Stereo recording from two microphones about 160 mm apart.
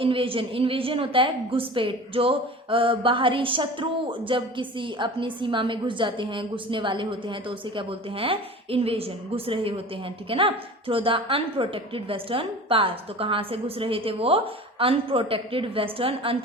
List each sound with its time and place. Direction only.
0.0 s a woman's voice: 35° right (ahead or behind)